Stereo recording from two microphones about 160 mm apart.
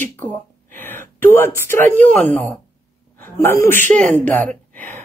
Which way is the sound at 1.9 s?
10° left (ahead or behind).